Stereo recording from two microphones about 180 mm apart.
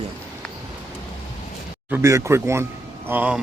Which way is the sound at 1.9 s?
15° right (ahead or behind).